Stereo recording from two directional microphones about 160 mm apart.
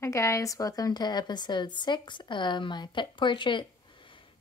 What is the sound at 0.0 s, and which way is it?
A woman's voice, 20° left (ahead or behind).